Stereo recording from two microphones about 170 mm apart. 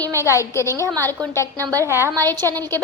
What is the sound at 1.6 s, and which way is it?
Speech, 20° right (ahead or behind).